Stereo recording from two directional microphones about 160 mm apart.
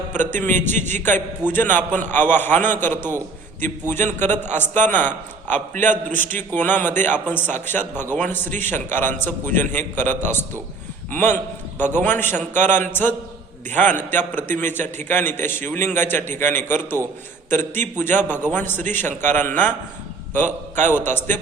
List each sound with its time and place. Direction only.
0.3 s a man's voice: 50° right (ahead or behind)
1.0 s a man's voice: 10° left (ahead or behind)
5.7 s a man's voice: 50° right (ahead or behind)
6.1 s a man's voice: 10° left (ahead or behind)
20.8 s a man's voice: 15° left (ahead or behind)